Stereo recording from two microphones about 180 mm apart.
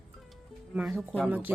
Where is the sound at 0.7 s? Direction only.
5° right (ahead or behind).